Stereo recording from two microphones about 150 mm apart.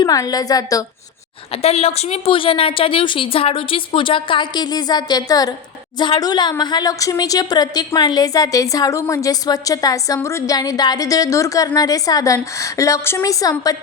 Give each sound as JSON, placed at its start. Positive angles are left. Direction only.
{"t": 0.0, "sound": "a woman's voice", "side_deg": 25}
{"t": 1.6, "sound": "a woman's voice", "side_deg": 45}